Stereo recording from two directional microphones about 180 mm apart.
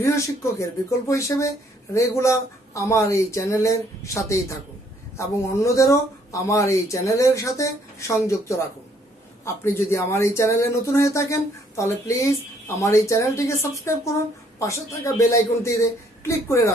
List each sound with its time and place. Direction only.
0.0 s speech: 15° left (ahead or behind)